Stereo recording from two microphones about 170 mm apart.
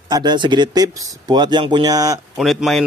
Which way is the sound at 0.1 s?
25° right (ahead or behind).